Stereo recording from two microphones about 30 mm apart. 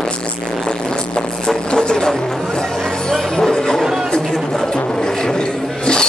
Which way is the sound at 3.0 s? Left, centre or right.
Centre.